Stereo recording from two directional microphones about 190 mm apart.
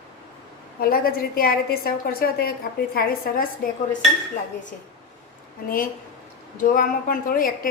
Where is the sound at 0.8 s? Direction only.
50° left (ahead or behind).